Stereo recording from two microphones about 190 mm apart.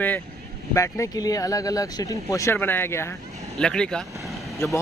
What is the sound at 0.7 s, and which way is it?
Speech, 15° left (ahead or behind).